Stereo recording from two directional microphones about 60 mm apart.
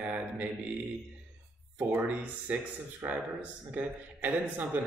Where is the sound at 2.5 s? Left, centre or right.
Right.